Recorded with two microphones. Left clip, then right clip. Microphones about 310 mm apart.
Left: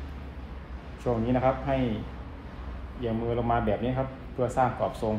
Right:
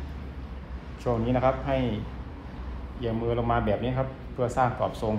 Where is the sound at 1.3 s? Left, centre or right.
Right.